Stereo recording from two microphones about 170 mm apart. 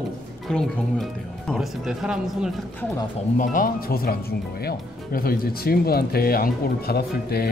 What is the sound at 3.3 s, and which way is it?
Speech, 50° left (ahead or behind).